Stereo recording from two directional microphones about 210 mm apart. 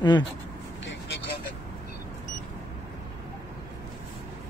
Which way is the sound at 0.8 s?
60° left (ahead or behind).